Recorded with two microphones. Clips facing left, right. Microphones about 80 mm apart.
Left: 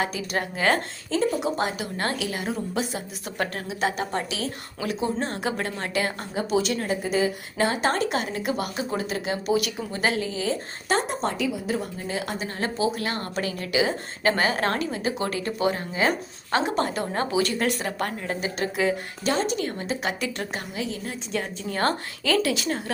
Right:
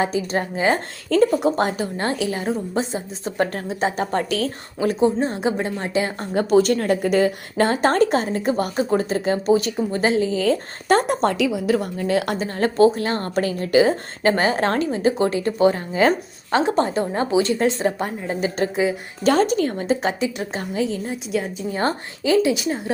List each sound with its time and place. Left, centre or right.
0.0 s a woman's voice: right
1.1 s speech: right
2.0 s a woman's voice: right
5.2 s a woman's voice: centre
6.3 s a woman's voice: right
10.4 s a woman's voice: right
12.4 s a woman's voice: right
18.3 s a woman's voice: right
19.2 s a woman's voice: right
21.6 s a woman's voice: centre